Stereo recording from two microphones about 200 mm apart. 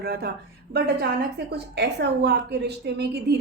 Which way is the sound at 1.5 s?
55° right (ahead or behind).